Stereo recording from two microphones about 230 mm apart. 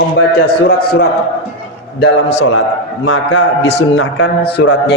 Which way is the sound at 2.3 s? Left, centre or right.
Left.